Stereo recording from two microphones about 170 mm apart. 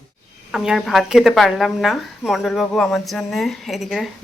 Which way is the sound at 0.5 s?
5° right (ahead or behind).